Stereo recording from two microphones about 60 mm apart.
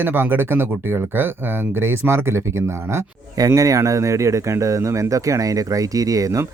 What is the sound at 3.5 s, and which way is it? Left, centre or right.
Speech, right.